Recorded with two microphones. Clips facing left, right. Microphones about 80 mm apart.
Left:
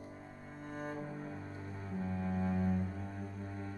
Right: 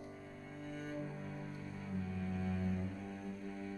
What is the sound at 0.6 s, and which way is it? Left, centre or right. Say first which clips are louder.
Cello: left 2 dB; left.